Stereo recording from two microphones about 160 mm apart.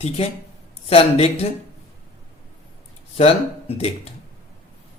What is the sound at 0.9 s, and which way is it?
Speech, 40° left (ahead or behind).